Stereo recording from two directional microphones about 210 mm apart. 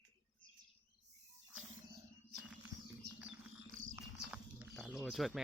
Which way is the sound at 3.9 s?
5° right (ahead or behind).